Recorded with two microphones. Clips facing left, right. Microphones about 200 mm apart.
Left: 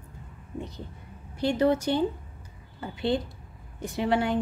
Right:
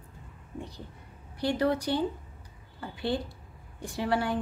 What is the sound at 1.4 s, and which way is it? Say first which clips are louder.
A woman's voice: left 4 dB; 25° left (ahead or behind).